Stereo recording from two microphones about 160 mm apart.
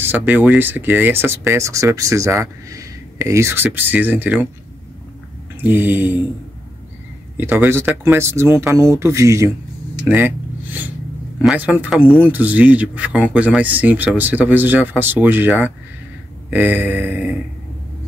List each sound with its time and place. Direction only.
0.0 s speech: 10° right (ahead or behind)
5.6 s speech: 10° right (ahead or behind)
7.3 s speech: 15° right (ahead or behind)